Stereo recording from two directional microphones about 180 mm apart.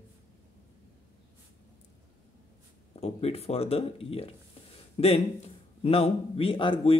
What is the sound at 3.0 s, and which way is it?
Speech, 35° left (ahead or behind).